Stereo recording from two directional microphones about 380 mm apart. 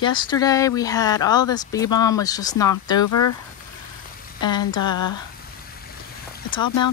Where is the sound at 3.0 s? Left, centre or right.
Left.